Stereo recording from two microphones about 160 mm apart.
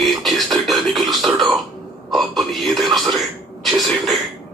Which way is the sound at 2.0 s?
Centre (ahead or behind).